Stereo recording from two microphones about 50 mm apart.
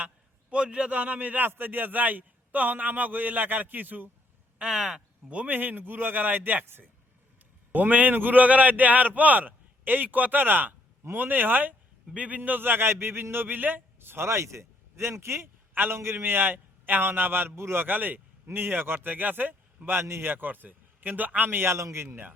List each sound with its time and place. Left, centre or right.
0.5 s a man's voice: centre
0.9 s a man's voice: right
4.5 s speech: centre
5.3 s a man's voice: right
7.7 s a man's voice: right
12.1 s a man's voice: right
12.4 s a man's voice: right
14.3 s speech: right
15.7 s a man's voice: right
16.0 s a man's voice: right
17.8 s a man's voice: right
21.5 s a man's voice: right